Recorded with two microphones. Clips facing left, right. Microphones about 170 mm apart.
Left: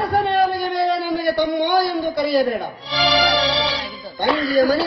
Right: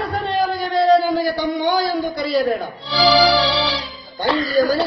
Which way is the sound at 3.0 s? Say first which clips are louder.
Right 4 dB; 35° right (ahead or behind).